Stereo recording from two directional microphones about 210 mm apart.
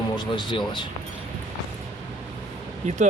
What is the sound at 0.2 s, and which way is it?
Speech, 20° left (ahead or behind).